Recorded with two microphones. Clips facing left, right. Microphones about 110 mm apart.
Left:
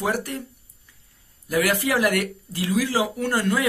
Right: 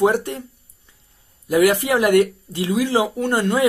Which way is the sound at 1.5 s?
20° right (ahead or behind).